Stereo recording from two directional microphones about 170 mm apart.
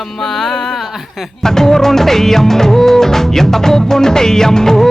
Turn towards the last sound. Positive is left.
turn(degrees=5)  # may be behind; listen again after turning